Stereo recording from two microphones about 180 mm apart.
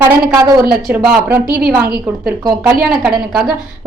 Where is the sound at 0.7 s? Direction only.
5° right (ahead or behind).